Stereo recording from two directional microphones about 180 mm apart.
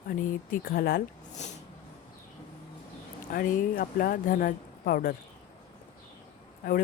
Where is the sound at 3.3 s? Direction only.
50° left (ahead or behind).